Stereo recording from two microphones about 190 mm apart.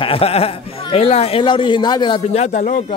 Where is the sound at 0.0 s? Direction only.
30° left (ahead or behind).